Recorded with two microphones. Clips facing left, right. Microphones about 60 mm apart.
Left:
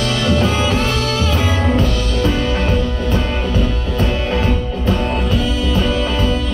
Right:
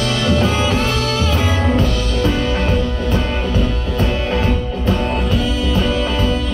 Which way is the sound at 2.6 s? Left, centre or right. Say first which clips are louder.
Even; right.